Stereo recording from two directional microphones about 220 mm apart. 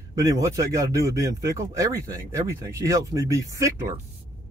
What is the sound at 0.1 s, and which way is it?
Speech, 15° right (ahead or behind).